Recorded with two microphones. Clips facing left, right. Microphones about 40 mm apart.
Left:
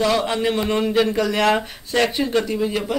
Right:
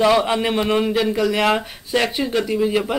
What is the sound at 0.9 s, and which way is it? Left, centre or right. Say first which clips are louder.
Speech: even; centre.